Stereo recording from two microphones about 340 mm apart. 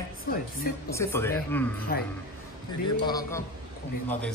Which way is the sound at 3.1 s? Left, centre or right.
Centre.